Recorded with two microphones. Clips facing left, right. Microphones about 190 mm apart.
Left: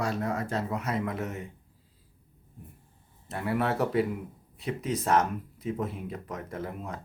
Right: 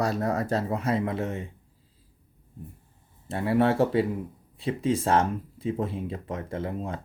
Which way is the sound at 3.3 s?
30° right (ahead or behind).